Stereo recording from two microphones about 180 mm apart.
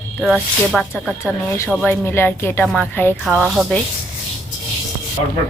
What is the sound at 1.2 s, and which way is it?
A woman's voice, 15° left (ahead or behind).